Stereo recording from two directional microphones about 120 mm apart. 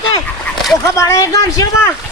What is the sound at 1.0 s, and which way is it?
Speech, 25° left (ahead or behind).